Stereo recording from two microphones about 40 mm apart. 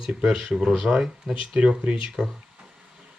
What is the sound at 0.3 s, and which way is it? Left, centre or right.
Speech, right.